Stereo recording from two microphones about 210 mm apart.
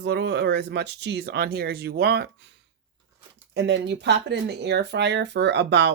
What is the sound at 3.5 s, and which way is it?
Speech, 55° right (ahead or behind).